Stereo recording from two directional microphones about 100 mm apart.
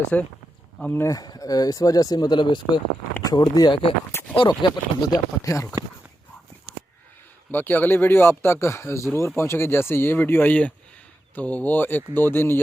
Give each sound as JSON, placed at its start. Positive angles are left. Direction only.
{"t": 0.1, "sound": "speech", "side_deg": 15}
{"t": 1.1, "sound": "speech", "side_deg": 40}
{"t": 7.5, "sound": "speech", "side_deg": 20}